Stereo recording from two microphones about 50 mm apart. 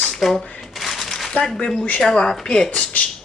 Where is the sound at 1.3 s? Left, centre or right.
Centre.